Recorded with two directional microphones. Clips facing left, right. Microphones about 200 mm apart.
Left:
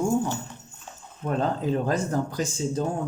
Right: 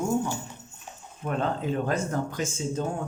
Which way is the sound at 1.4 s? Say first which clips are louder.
Left 2 dB; 35° left (ahead or behind).